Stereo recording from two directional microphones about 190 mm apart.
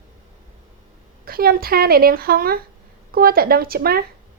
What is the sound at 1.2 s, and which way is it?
Speech, 50° right (ahead or behind).